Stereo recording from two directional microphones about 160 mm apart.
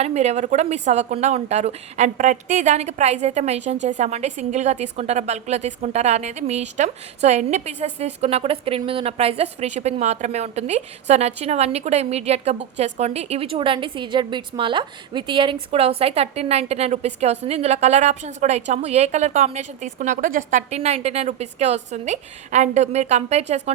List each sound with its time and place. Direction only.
0.0 s a woman's voice: 45° right (ahead or behind)